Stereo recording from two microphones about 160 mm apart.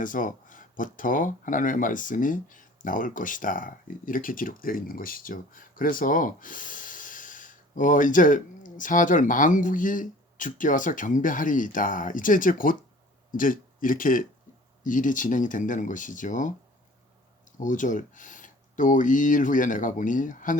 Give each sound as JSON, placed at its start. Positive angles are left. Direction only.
{"t": 0.0, "sound": "speech", "side_deg": 55}
{"t": 17.6, "sound": "speech", "side_deg": 55}